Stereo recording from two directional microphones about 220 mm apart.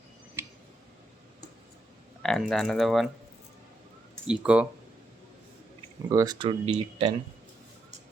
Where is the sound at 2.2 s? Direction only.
Centre (ahead or behind).